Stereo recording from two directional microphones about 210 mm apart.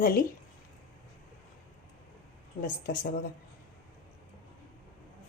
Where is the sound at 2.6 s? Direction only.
45° left (ahead or behind).